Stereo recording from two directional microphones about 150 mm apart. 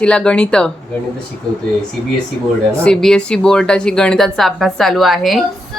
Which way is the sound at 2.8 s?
5° left (ahead or behind).